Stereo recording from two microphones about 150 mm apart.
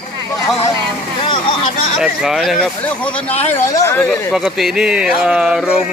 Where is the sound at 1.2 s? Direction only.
35° left (ahead or behind).